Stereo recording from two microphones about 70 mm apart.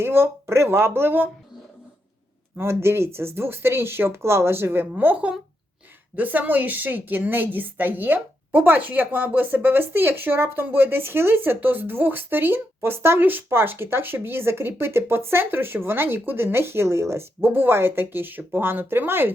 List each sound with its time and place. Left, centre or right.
0.0 s a woman's voice: right
2.6 s a woman's voice: right
6.1 s a woman's voice: right